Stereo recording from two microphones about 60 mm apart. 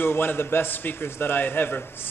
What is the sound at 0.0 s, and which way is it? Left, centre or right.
A man's voice, left.